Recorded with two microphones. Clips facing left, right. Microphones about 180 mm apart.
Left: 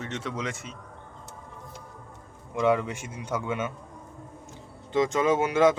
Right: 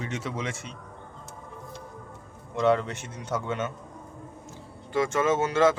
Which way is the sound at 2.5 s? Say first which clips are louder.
Right 1 dB; 10° left (ahead or behind).